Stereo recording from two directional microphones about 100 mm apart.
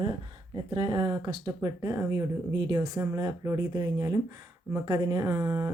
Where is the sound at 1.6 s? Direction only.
35° right (ahead or behind).